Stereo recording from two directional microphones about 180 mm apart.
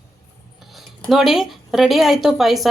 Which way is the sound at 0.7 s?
Centre (ahead or behind).